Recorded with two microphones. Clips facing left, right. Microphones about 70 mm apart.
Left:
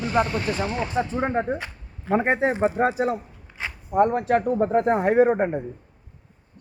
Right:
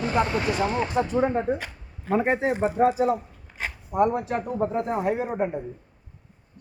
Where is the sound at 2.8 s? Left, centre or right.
Left.